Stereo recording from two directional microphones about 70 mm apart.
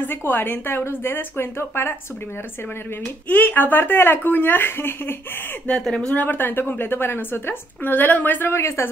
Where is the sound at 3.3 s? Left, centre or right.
Left.